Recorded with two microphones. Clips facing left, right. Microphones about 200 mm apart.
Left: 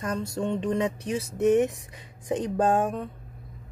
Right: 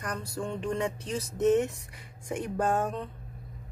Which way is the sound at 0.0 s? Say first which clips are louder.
Left 6 dB; 25° left (ahead or behind).